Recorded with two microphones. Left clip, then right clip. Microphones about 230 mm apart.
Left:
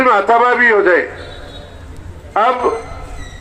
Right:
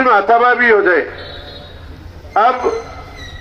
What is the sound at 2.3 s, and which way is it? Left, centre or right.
Speech, left.